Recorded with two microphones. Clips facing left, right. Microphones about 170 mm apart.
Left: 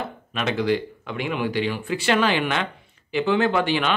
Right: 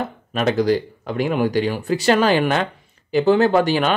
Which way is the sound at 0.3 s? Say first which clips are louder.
Right 5 dB; 40° right (ahead or behind).